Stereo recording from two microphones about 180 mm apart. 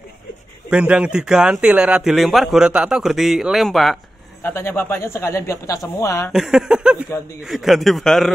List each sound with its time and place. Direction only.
0.7 s a man's voice: 5° right (ahead or behind)
4.4 s speech: 15° left (ahead or behind)
6.3 s a man's voice: 5° right (ahead or behind)